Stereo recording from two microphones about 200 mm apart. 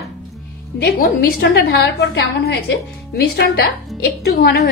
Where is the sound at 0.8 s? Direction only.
50° left (ahead or behind).